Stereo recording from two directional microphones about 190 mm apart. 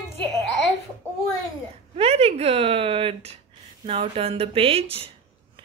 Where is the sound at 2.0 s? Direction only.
30° right (ahead or behind).